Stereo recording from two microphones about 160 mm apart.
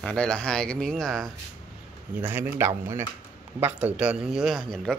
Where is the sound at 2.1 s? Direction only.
10° right (ahead or behind).